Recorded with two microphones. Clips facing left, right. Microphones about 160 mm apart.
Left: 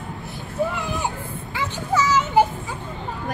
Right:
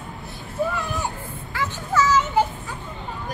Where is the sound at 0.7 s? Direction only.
15° left (ahead or behind).